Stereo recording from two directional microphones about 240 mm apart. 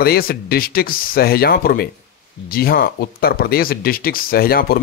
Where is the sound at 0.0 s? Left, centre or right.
Left.